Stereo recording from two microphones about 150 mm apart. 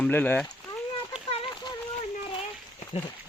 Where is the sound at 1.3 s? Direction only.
35° left (ahead or behind).